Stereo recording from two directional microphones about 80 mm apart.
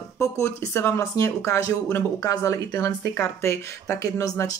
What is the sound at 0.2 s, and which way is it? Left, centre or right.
Speech, left.